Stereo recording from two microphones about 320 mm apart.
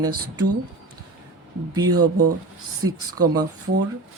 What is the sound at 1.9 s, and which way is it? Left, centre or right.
Speech, right.